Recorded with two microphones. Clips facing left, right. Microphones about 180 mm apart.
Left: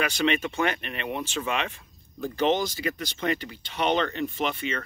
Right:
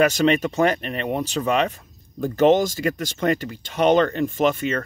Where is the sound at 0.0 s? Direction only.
40° right (ahead or behind).